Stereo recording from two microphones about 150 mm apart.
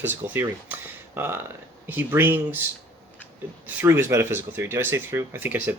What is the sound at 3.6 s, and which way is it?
Speech, 15° right (ahead or behind).